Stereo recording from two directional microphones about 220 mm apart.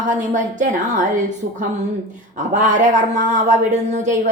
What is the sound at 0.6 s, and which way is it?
Speech, 35° right (ahead or behind).